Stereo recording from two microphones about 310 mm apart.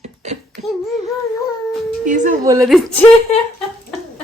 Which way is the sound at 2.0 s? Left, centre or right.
Right.